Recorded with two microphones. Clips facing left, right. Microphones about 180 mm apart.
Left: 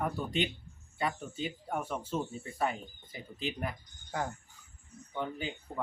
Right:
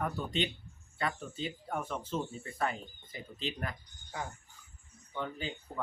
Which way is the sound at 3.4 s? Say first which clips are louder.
Left 2 dB; 15° left (ahead or behind).